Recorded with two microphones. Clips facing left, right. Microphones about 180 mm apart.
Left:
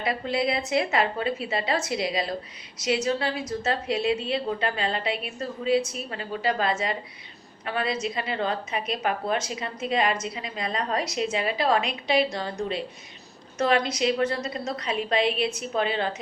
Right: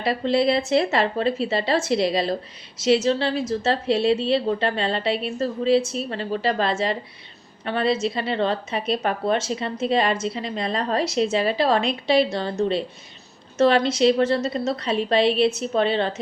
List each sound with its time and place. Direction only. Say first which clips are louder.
0.0 s a woman's voice: right 6 dB; 30° right (ahead or behind)